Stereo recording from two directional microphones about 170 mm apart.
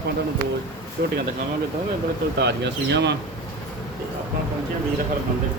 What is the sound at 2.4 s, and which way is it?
Speech, 85° right.